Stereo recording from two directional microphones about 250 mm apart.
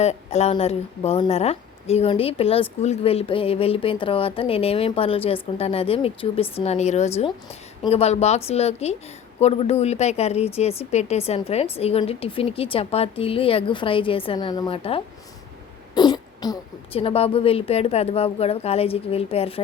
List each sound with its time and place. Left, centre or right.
0.0 s speech: left